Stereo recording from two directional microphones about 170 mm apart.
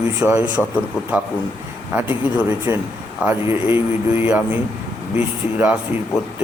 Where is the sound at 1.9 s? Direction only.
10° right (ahead or behind).